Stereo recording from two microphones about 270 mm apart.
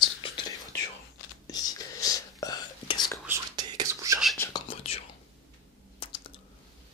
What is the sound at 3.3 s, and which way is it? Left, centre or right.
Whispering, centre.